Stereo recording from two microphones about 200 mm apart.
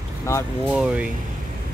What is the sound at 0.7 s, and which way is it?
Speech, 5° right (ahead or behind).